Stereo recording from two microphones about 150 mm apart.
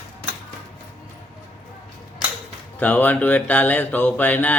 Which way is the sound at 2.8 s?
10° left (ahead or behind).